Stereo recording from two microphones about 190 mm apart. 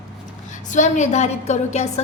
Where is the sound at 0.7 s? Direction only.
40° left (ahead or behind).